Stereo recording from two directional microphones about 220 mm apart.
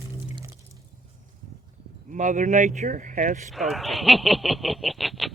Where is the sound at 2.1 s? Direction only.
35° right (ahead or behind).